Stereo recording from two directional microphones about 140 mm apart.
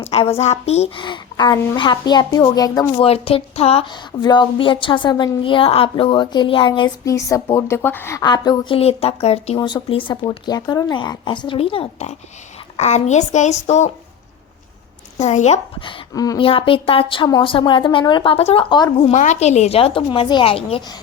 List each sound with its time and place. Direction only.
0.0 s a woman's voice: 45° left (ahead or behind)
1.0 s a woman's voice: 35° left (ahead or behind)
3.0 s a woman's voice: 45° left (ahead or behind); by 8.2 s 15° left (ahead or behind)
8.2 s a woman's voice: 30° left (ahead or behind); by 9.6 s 45° left (ahead or behind)
9.6 s a woman's voice: 30° left (ahead or behind); by 13.9 s 55° left (ahead or behind)
15.2 s a woman's voice: 55° left (ahead or behind)
16.1 s speech: 25° left (ahead or behind)
16.4 s a woman's voice: 40° left (ahead or behind)
19.1 s a woman's voice: 60° left (ahead or behind); by 20.8 s 40° left (ahead or behind)